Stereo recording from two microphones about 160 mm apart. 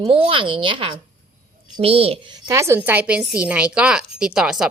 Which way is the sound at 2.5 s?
15° right (ahead or behind).